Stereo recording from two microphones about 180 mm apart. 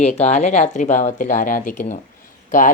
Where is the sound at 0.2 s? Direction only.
40° left (ahead or behind).